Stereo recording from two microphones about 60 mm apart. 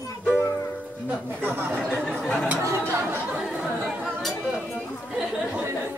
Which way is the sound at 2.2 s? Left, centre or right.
Centre.